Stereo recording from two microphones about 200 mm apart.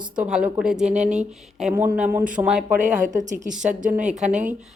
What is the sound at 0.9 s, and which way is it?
Speech, 35° right (ahead or behind).